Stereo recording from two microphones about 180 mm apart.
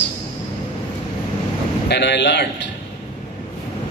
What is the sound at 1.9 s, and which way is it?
Speech, 75° left (ahead or behind).